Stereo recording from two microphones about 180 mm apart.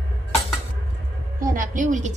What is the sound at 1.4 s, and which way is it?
Speech, 50° right (ahead or behind).